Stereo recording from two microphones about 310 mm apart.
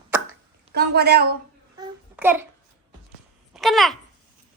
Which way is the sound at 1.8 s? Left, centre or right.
Centre.